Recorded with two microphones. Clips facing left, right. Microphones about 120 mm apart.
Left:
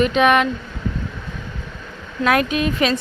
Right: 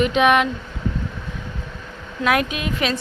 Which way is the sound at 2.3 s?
10° right (ahead or behind).